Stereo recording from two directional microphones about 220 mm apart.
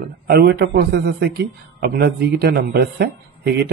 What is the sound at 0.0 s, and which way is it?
A man's voice, 45° right (ahead or behind).